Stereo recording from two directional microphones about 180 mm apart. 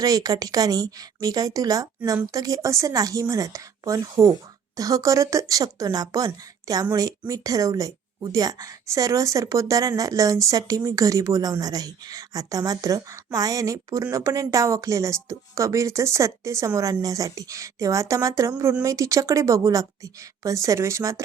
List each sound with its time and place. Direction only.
0.0 s a woman's voice: 20° right (ahead or behind)